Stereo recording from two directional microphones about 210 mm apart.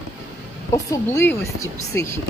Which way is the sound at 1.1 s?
10° left (ahead or behind).